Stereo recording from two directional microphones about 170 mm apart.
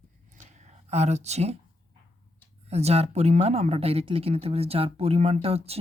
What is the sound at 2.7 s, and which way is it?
A woman's voice, 40° right (ahead or behind).